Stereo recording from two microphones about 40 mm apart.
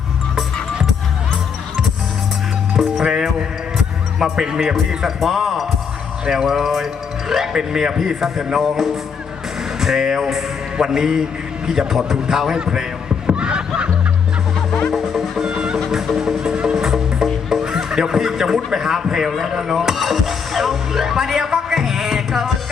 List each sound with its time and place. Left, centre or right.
3.0 s music: centre
3.8 s a man's voice: centre
13.2 s snicker: right
14.9 s music: centre
15.5 s music: centre
19.0 s speech: centre
19.5 s music: centre